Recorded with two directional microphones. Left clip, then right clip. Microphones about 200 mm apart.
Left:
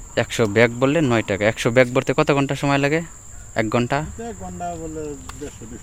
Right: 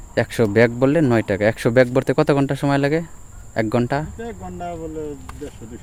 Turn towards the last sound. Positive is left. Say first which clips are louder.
# even
turn(degrees=20)  # may be behind; listen again after turning